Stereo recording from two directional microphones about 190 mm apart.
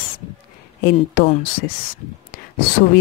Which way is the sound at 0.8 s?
50° left (ahead or behind).